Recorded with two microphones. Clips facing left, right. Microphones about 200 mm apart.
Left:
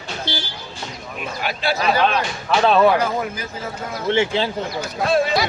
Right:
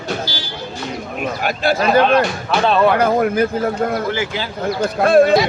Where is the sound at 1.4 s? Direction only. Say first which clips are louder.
Right 4 dB; 50° right (ahead or behind).